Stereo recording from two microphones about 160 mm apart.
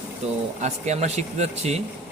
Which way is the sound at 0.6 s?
45° right (ahead or behind).